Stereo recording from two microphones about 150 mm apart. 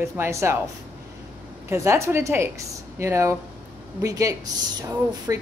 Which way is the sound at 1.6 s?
20° right (ahead or behind).